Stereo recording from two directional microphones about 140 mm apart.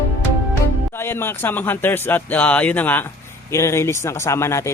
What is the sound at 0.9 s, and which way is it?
Speech, 15° left (ahead or behind).